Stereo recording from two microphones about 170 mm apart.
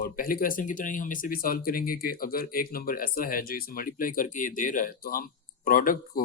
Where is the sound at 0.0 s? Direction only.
60° left (ahead or behind).